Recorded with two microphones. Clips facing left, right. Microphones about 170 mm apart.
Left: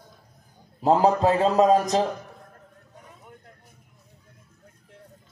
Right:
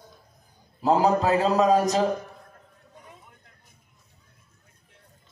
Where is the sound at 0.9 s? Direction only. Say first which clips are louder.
Left 1 dB; 30° left (ahead or behind).